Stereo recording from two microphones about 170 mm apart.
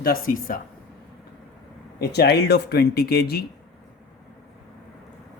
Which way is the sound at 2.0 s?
70° left (ahead or behind).